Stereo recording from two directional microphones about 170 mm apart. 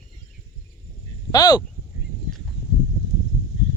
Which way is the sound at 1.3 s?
20° left (ahead or behind).